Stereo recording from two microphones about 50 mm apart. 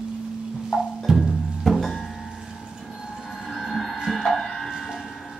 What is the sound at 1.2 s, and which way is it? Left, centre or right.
Music, centre.